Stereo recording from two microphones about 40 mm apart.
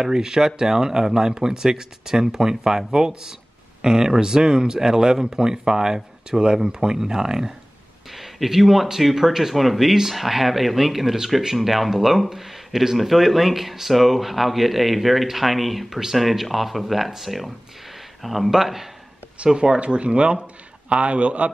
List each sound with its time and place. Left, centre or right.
0.0 s speech: centre
19.3 s a man's voice: right